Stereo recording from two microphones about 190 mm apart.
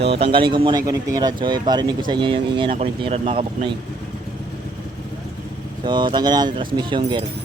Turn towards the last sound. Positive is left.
turn(degrees=-25)  # may be behind; listen again after turning